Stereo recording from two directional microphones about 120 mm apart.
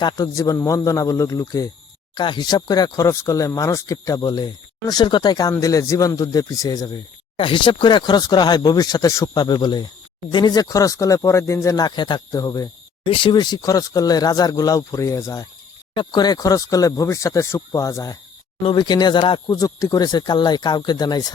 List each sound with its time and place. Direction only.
0.0 s speech: 30° left (ahead or behind)
2.1 s speech: 40° left (ahead or behind)
7.3 s speech: 45° left (ahead or behind)
13.1 s speech: 45° left (ahead or behind); by 18.2 s 30° left (ahead or behind)
18.6 s speech: 40° left (ahead or behind)
19.5 s speech: 30° left (ahead or behind)